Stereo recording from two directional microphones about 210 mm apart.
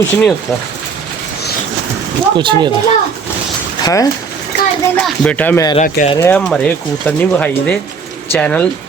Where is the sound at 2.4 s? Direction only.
25° right (ahead or behind).